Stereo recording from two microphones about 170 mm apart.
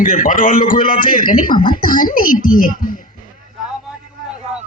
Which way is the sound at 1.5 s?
30° left (ahead or behind).